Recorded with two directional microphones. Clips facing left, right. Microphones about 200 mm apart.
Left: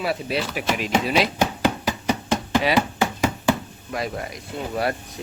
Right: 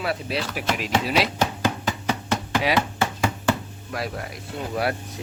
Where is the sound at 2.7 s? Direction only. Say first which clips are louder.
Left 3 dB; 15° left (ahead or behind).